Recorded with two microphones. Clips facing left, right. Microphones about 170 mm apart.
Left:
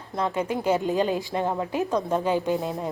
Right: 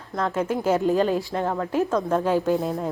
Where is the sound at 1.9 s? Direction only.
Centre (ahead or behind).